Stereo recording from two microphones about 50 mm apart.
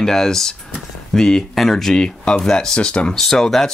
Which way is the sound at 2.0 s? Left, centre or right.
Centre.